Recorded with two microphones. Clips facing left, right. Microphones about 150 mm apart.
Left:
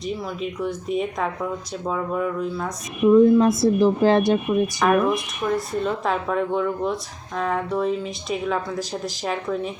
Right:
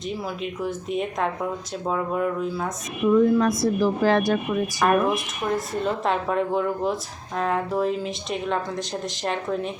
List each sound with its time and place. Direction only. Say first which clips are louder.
0.6 s speech: left 2 dB; centre (ahead or behind)
3.1 s speech: left 4 dB; 25° left (ahead or behind)
4.8 s speech: right 2 dB; centre (ahead or behind)